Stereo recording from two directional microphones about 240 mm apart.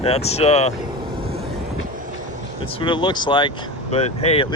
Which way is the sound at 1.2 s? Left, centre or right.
Right.